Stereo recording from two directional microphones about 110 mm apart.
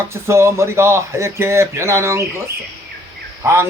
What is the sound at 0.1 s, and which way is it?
Speech, 25° right (ahead or behind).